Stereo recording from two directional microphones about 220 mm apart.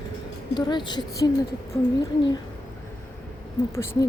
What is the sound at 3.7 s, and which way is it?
Speech, 10° left (ahead or behind).